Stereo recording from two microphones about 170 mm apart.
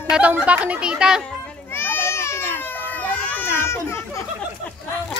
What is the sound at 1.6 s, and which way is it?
Children playing, 15° left (ahead or behind).